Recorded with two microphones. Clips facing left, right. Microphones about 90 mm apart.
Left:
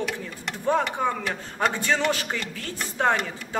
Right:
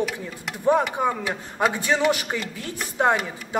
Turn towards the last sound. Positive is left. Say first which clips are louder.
# right 2 dB
turn(degrees=-15)  # may be behind; listen again after turning